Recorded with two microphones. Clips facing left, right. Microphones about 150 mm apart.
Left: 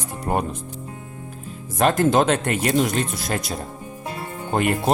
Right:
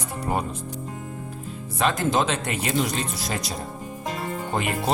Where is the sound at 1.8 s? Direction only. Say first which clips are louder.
Left 5 dB; 50° left (ahead or behind).